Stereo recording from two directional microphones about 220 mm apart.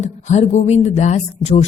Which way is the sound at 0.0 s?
30° left (ahead or behind).